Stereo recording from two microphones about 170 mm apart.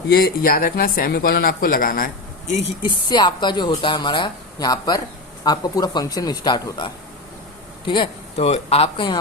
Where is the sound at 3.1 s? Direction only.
25° left (ahead or behind).